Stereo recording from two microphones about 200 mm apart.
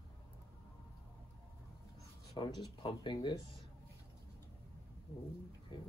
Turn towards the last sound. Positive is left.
turn(degrees=25)  # may be behind; listen again after turning